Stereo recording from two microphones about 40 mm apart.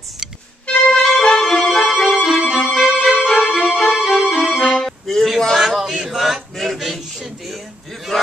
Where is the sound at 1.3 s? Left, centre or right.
Centre.